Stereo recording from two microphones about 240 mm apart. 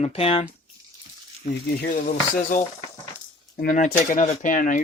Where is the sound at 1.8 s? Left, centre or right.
Left.